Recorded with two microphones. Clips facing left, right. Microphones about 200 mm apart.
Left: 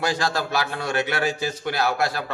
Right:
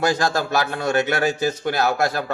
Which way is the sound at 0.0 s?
45° right (ahead or behind).